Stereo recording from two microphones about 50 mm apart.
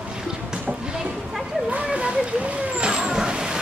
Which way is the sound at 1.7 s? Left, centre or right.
Right.